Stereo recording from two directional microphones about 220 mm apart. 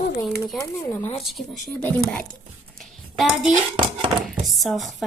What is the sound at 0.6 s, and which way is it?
Speech, 10° left (ahead or behind).